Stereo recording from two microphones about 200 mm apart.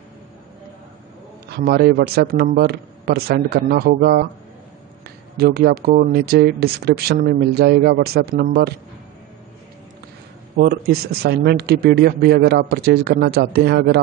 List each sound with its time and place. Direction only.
1.5 s speech: 50° right (ahead or behind)
10.6 s speech: 50° right (ahead or behind)